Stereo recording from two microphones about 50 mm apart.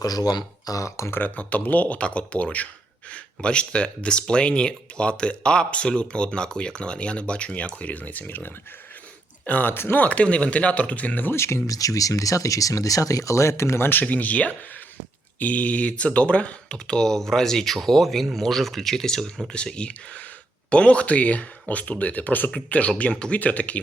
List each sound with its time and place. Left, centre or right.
0.8 s speech: left
1.4 s speech: left
9.7 s speech: left
10.0 s speech: left
11.3 s speech: left
12.1 s speech: left
14.0 s speech: left
22.5 s speech: left